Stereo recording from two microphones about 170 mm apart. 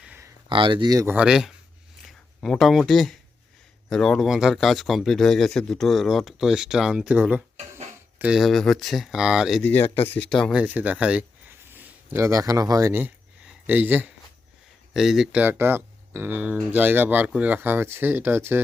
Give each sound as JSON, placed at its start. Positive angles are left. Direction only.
{"t": 0.4, "sound": "speech", "side_deg": -30}
{"t": 1.1, "sound": "speech", "side_deg": -5}
{"t": 9.6, "sound": "speech", "side_deg": 10}
{"t": 10.5, "sound": "speech", "side_deg": -10}